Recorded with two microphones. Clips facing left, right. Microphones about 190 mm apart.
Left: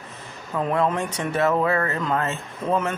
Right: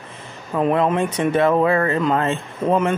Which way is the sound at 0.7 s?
20° right (ahead or behind).